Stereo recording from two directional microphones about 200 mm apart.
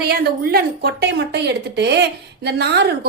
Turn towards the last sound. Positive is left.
turn(degrees=-55)  # may be behind; listen again after turning